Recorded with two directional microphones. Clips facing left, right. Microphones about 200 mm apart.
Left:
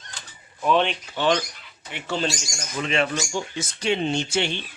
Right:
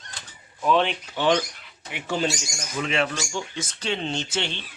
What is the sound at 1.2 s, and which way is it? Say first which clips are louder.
Speech: right 1 dB; 15° right (ahead or behind).